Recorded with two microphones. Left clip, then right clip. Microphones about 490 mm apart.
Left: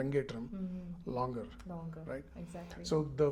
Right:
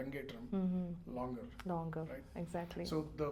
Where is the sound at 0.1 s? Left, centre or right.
Left.